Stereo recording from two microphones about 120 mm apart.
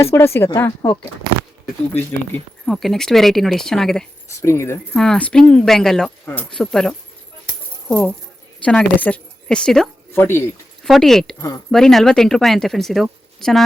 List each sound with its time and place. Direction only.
0.0 s speech: 20° left (ahead or behind)
2.6 s speech: centre (ahead or behind)
4.3 s speech: 25° left (ahead or behind)
4.9 s speech: 5° left (ahead or behind)
6.2 s speech: 15° left (ahead or behind)
6.5 s speech: 5° left (ahead or behind)
7.4 s music: 5° left (ahead or behind)
8.6 s a woman's voice: 10° left (ahead or behind)
10.1 s speech: 20° left (ahead or behind)
10.8 s speech: centre (ahead or behind)